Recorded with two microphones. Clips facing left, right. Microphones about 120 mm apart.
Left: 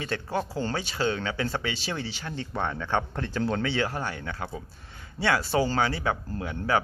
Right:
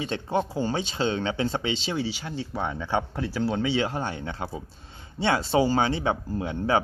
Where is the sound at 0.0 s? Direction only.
20° right (ahead or behind).